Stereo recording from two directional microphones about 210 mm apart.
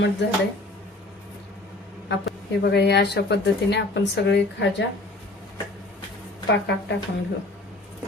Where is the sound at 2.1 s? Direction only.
50° left (ahead or behind).